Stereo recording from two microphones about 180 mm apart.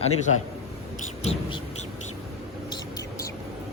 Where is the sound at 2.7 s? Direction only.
20° left (ahead or behind).